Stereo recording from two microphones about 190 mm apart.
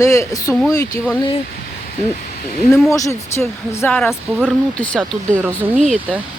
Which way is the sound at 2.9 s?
15° left (ahead or behind).